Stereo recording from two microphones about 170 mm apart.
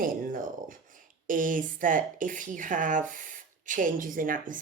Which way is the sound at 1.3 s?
50° right (ahead or behind).